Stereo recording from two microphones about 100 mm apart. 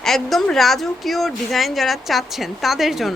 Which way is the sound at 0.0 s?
Centre (ahead or behind).